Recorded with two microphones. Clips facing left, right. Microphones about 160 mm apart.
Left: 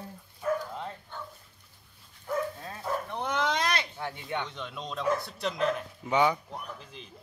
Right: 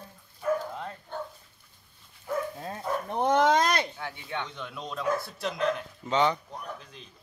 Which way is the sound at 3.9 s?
20° left (ahead or behind).